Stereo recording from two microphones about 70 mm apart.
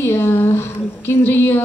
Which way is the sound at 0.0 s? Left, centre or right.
Left.